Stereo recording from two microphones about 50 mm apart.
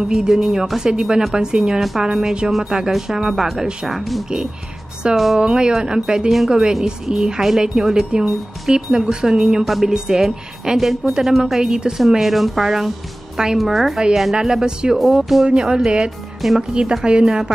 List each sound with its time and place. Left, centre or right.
0.0 s speech: centre
5.4 s speech: centre
9.7 s speech: centre
9.9 s speech: centre
12.1 s speech: centre
16.3 s speech: centre
16.8 s speech: centre